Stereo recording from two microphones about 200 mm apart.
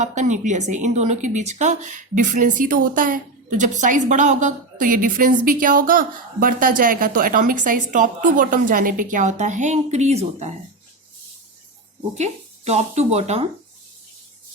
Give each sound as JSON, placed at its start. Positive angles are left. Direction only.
{"t": 0.0, "sound": "a woman's voice", "side_deg": -35}
{"t": 12.1, "sound": "a woman's voice", "side_deg": -35}